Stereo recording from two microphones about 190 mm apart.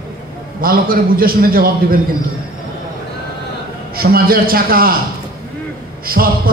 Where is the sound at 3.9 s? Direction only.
50° right (ahead or behind).